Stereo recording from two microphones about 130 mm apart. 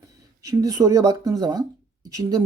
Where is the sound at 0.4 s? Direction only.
25° right (ahead or behind).